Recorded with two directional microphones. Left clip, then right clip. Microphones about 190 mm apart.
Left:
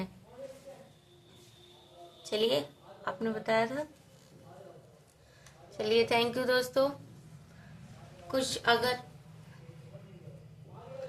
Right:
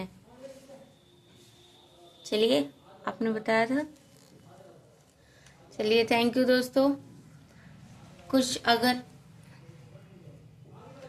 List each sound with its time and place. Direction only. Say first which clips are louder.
2.3 s speech: right 4 dB; 30° right (ahead or behind)
5.7 s speech: right 3 dB; 30° right (ahead or behind)
8.3 s a woman's voice: right 3 dB; 45° right (ahead or behind)